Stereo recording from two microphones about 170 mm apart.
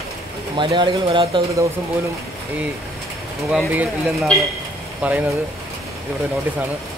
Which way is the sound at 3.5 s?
Centre (ahead or behind).